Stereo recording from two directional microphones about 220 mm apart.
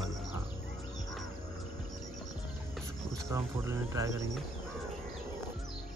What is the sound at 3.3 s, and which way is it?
Speech, 15° right (ahead or behind).